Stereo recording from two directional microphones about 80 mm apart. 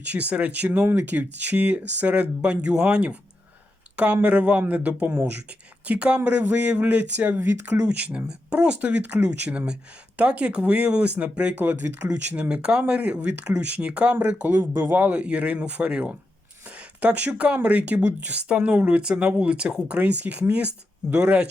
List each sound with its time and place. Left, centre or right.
0.0 s speech: centre